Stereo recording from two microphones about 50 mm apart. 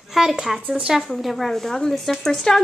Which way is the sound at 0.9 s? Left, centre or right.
Centre.